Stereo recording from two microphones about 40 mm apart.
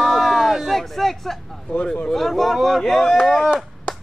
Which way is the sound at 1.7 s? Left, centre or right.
Left.